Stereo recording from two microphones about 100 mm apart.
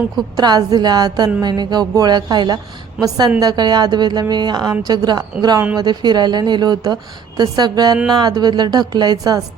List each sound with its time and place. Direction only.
0.3 s a woman's voice: 45° right (ahead or behind)